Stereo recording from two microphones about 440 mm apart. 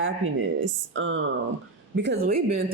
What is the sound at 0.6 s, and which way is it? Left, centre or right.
Speech, right.